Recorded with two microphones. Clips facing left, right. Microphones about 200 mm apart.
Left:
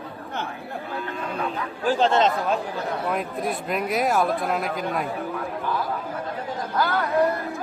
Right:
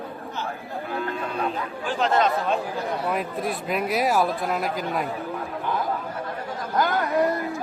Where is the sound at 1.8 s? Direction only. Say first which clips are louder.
Left 3 dB; 35° left (ahead or behind).